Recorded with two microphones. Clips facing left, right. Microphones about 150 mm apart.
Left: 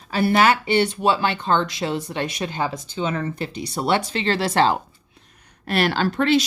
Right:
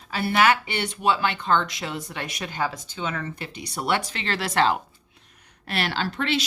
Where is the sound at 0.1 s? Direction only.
40° left (ahead or behind).